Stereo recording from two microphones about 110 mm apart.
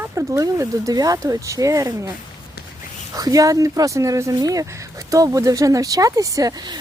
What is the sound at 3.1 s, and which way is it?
Speech, 30° right (ahead or behind).